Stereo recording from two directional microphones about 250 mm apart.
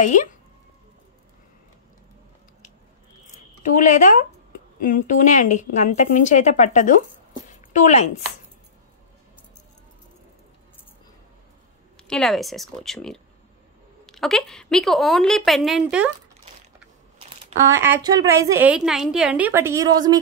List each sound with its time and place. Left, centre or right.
0.0 s speech: left
3.3 s speech: left
7.4 s a sound: left
12.0 s a woman's voice: centre
17.6 s a woman's voice: centre